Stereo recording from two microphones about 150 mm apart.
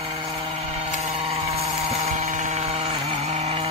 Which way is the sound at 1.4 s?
45° right (ahead or behind).